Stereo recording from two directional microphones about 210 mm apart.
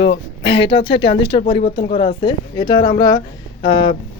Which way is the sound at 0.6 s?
25° left (ahead or behind).